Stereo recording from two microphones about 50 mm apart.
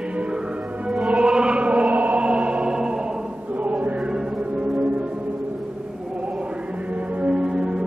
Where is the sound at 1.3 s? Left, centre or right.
Centre.